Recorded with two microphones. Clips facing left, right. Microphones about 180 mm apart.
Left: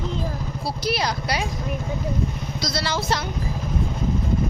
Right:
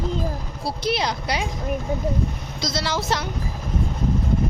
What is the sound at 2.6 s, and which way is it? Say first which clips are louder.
Speech: right 1 dB; 15° right (ahead or behind).